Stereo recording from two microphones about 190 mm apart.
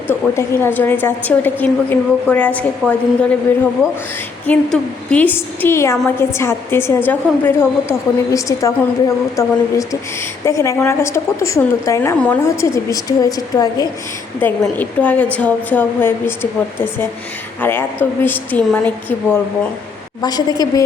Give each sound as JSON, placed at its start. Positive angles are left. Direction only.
{"t": 0.1, "sound": "a woman's voice", "side_deg": 10}
{"t": 4.4, "sound": "a woman's voice", "side_deg": 5}
{"t": 14.6, "sound": "a woman's voice", "side_deg": 10}
{"t": 20.2, "sound": "a woman's voice", "side_deg": 20}